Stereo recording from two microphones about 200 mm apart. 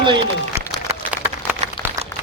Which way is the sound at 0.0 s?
25° right (ahead or behind).